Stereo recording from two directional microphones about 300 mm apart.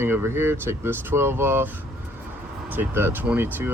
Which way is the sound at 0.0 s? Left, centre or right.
Centre.